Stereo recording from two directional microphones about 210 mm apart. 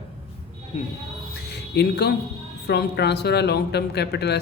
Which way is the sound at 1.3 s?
55° left (ahead or behind).